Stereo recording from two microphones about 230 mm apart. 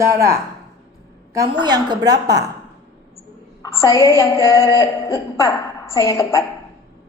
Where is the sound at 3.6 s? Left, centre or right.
Centre.